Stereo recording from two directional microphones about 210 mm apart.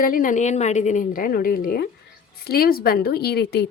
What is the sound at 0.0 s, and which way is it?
Speech, 40° left (ahead or behind).